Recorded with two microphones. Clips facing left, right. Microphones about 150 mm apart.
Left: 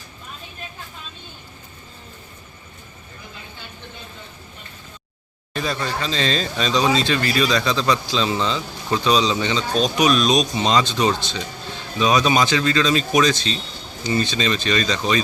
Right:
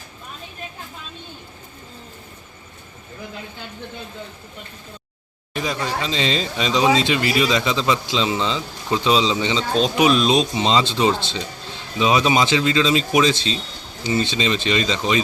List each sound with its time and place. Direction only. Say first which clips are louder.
5.5 s speech: even; 15° right (ahead or behind)